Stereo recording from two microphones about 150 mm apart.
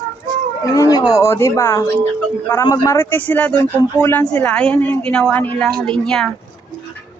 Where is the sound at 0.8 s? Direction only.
25° left (ahead or behind); by 6.3 s 5° left (ahead or behind).